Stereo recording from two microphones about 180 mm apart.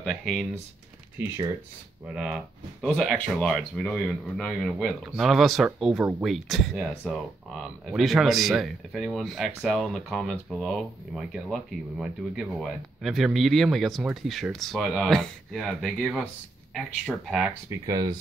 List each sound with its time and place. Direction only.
0.0 s speech: centre (ahead or behind)
1.1 s speech: 15° right (ahead or behind)
2.1 s speech: centre (ahead or behind)
17.6 s speech: 20° right (ahead or behind)